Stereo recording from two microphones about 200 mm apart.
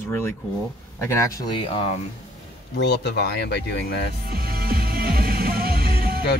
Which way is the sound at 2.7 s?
60° left (ahead or behind).